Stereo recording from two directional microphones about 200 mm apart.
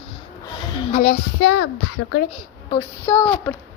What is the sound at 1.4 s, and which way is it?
Speech, 75° left (ahead or behind).